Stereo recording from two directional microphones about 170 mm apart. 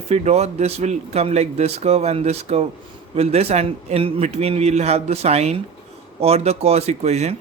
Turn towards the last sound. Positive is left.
turn(degrees=-40)  # may be behind; listen again after turning